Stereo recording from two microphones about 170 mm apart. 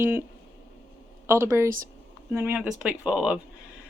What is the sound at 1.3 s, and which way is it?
Speech, 15° right (ahead or behind).